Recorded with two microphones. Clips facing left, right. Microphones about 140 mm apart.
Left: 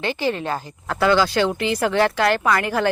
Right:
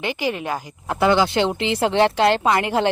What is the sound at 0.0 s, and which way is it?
Speech, 15° right (ahead or behind).